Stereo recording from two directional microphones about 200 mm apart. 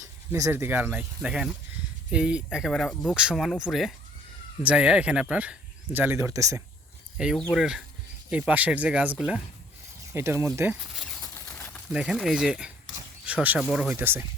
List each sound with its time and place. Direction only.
0.0 s speech: 15° right (ahead or behind)
7.2 s speech: centre (ahead or behind)
10.9 s a sound: centre (ahead or behind)
11.9 s speech: 5° right (ahead or behind)